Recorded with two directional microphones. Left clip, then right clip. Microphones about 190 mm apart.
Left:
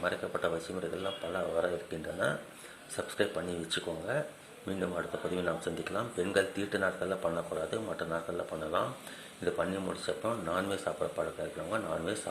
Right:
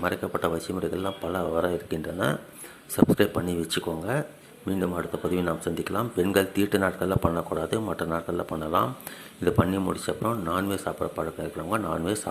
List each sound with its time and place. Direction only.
0.0 s speech: 25° right (ahead or behind)